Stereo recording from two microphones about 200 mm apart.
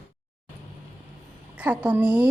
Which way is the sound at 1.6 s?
5° right (ahead or behind).